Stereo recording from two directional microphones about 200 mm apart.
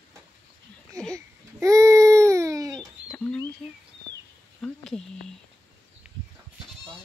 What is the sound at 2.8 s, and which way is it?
Bird, 5° left (ahead or behind).